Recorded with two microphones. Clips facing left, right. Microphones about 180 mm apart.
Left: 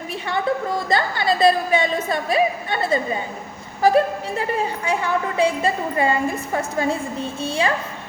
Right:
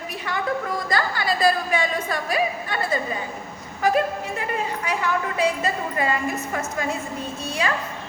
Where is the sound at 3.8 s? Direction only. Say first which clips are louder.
Left 5 dB; 30° left (ahead or behind).